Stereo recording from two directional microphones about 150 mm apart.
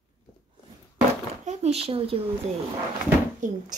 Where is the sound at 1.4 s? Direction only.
50° right (ahead or behind).